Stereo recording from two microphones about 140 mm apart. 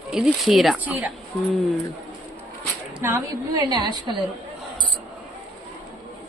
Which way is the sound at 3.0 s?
20° right (ahead or behind).